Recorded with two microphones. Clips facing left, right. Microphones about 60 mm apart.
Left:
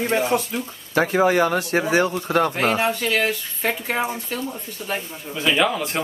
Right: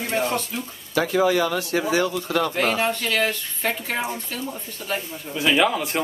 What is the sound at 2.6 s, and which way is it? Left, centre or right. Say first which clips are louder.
Speech: left 2 dB; centre.